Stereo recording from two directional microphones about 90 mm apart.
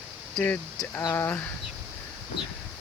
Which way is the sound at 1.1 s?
25° left (ahead or behind).